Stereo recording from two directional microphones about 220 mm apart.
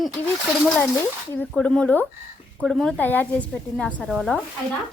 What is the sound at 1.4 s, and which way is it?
A woman's voice, 5° left (ahead or behind).